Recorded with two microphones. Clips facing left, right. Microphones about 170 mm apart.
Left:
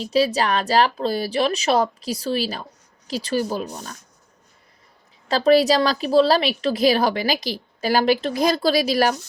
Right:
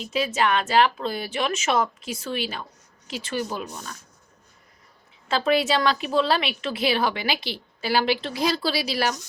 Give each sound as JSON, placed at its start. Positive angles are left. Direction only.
{"t": 0.0, "sound": "a woman's voice", "side_deg": 35}
{"t": 5.3, "sound": "a woman's voice", "side_deg": 35}